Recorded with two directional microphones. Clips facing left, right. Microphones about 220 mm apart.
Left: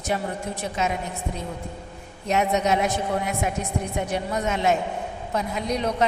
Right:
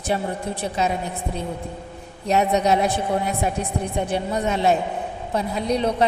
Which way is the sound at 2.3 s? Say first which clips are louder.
Right 3 dB; 35° right (ahead or behind).